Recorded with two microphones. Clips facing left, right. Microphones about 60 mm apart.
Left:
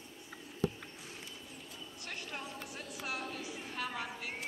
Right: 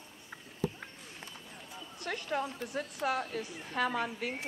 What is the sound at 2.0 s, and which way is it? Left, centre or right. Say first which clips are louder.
A woman's voice: right 10 dB; right.